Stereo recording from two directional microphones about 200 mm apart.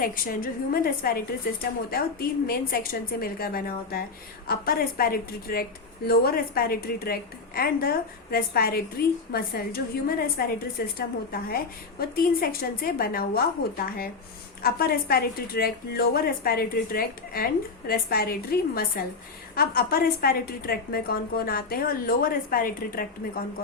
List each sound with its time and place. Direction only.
0.0 s a woman's voice: 45° left (ahead or behind)